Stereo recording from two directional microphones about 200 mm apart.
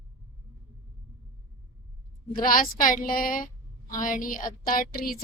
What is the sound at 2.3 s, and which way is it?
A woman's voice, 45° left (ahead or behind).